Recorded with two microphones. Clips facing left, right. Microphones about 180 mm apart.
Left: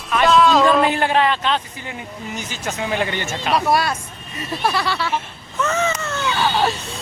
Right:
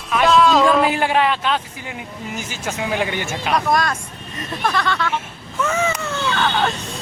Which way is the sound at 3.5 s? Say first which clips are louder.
Left 1 dB; 5° left (ahead or behind).